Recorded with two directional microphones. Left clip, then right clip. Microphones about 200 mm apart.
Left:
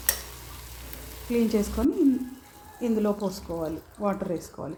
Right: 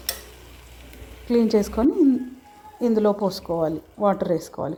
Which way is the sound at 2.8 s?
20° right (ahead or behind).